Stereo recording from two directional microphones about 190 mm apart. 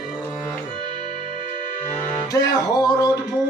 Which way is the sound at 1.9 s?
20° left (ahead or behind).